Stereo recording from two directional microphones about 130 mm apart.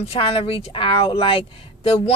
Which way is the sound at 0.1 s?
45° left (ahead or behind).